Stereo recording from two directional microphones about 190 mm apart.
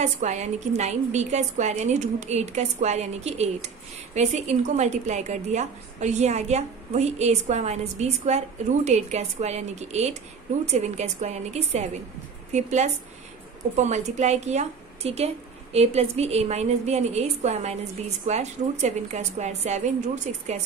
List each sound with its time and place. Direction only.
0.0 s a woman's voice: 40° right (ahead or behind)